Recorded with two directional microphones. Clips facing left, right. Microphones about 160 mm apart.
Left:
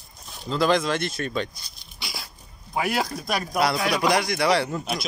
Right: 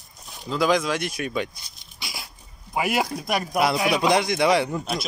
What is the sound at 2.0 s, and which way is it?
Dog, 15° right (ahead or behind).